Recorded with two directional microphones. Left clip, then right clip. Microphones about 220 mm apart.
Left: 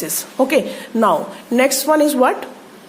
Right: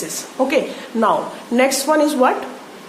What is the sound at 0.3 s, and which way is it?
A woman's voice, 40° left (ahead or behind).